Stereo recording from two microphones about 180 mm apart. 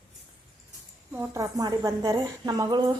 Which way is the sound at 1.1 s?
15° right (ahead or behind).